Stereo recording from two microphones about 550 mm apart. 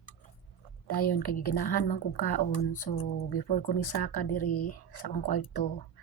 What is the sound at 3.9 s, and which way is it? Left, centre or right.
Speech, left.